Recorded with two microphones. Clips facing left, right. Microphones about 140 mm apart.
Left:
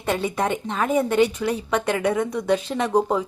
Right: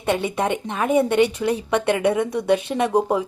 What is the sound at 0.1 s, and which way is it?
A woman's voice, 20° right (ahead or behind).